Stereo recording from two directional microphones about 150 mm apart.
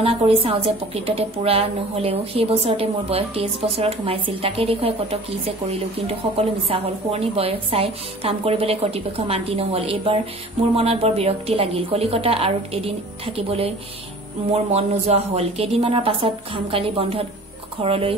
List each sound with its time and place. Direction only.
0.0 s a woman's voice: 40° right (ahead or behind)